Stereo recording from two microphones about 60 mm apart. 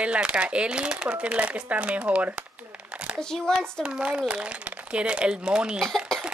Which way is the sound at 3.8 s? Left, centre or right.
Centre.